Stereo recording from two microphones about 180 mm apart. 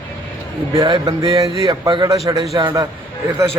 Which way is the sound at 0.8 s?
25° right (ahead or behind).